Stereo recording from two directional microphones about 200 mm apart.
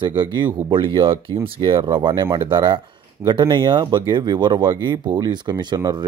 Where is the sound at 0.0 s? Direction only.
25° right (ahead or behind).